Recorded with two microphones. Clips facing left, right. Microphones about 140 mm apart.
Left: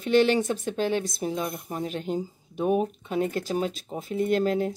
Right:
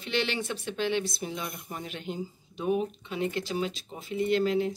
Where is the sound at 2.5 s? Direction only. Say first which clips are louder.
Left 4 dB; 50° left (ahead or behind).